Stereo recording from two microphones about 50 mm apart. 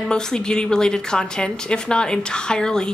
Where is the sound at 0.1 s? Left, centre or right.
Centre.